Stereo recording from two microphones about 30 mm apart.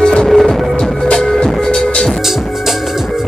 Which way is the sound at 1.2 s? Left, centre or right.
Centre.